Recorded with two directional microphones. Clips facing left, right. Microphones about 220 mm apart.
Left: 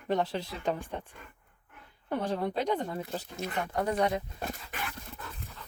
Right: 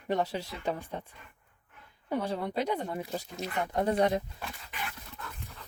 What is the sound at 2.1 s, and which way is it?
Speech, 10° right (ahead or behind).